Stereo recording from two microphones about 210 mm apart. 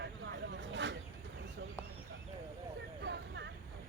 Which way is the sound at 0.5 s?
60° right (ahead or behind).